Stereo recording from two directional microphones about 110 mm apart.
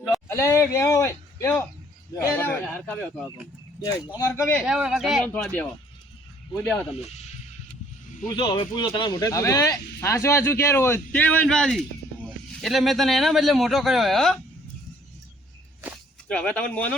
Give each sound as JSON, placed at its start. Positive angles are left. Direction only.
{"t": 0.3, "sound": "a sound", "side_deg": 25}
{"t": 2.6, "sound": "speech", "side_deg": 15}
{"t": 4.3, "sound": "a man's voice", "side_deg": 20}
{"t": 4.6, "sound": "speech", "side_deg": -5}
{"t": 5.3, "sound": "speech", "side_deg": 10}
{"t": 7.1, "sound": "speech", "side_deg": 80}
{"t": 8.3, "sound": "a man's voice", "side_deg": 45}
{"t": 16.3, "sound": "speech", "side_deg": 10}